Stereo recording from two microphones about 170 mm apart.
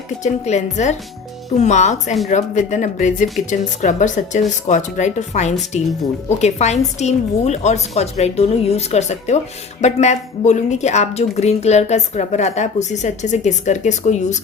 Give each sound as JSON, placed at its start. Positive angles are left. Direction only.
{"t": 0.2, "sound": "a woman's voice", "side_deg": 45}